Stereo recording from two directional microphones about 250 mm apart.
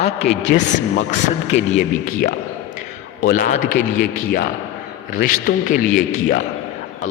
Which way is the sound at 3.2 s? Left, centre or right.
Left.